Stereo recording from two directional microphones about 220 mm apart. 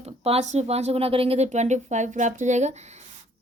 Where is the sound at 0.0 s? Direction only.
30° right (ahead or behind).